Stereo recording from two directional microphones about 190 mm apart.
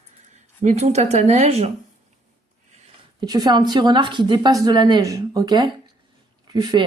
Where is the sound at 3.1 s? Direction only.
20° right (ahead or behind).